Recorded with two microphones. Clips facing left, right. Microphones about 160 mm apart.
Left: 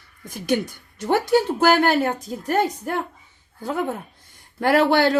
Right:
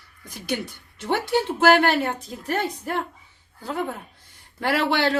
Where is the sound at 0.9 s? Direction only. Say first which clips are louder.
Left 4 dB; 45° left (ahead or behind).